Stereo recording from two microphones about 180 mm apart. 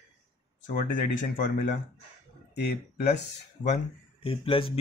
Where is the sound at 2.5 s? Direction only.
70° left (ahead or behind).